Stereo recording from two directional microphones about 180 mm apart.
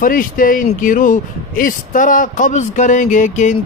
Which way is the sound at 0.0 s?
50° left (ahead or behind).